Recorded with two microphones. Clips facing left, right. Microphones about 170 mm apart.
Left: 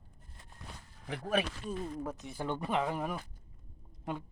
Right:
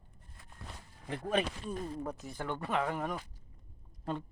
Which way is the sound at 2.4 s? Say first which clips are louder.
Left 1 dB; 15° left (ahead or behind).